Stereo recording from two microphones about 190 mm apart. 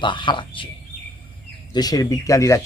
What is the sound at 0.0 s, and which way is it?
Speech, 25° left (ahead or behind).